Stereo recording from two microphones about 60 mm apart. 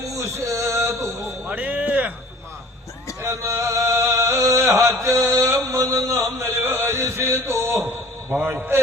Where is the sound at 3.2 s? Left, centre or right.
Right.